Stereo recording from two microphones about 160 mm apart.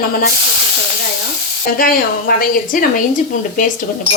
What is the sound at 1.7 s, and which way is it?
A woman's voice, 65° left (ahead or behind).